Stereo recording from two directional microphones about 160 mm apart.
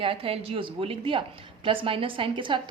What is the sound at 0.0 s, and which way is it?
A woman's voice, 35° right (ahead or behind).